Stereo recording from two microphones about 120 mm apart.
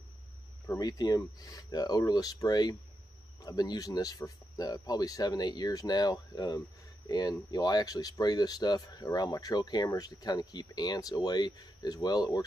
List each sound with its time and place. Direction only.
0.7 s speech: 30° left (ahead or behind)